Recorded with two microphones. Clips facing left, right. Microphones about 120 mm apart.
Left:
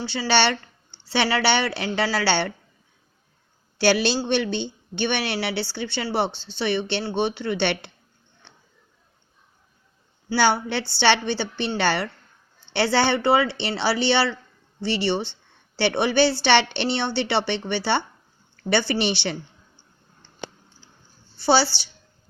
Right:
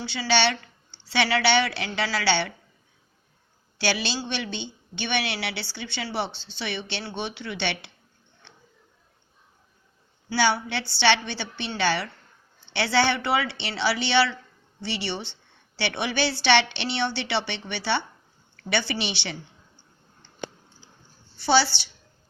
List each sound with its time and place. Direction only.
0.3 s a woman's voice: 50° left (ahead or behind)
3.8 s a woman's voice: 50° left (ahead or behind)
10.3 s a woman's voice: 50° left (ahead or behind)
13.4 s a woman's voice: 45° left (ahead or behind)
21.3 s a woman's voice: 35° left (ahead or behind)